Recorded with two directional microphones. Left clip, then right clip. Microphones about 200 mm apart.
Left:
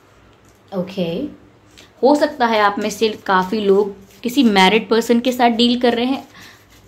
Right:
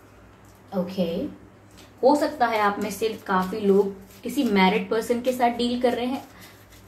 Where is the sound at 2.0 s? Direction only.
50° left (ahead or behind).